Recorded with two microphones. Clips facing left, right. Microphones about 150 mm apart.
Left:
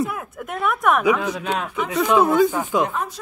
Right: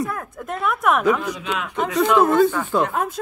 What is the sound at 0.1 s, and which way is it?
Speech, 10° left (ahead or behind).